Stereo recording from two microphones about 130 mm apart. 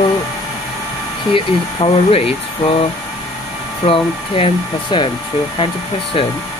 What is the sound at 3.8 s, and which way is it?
Speech, 40° left (ahead or behind).